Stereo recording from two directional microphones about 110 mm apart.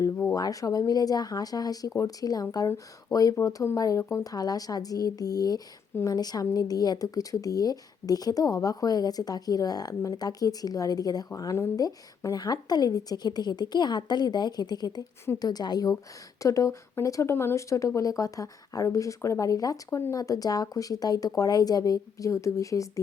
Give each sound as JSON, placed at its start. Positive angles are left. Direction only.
{"t": 0.3, "sound": "a woman's voice", "side_deg": 35}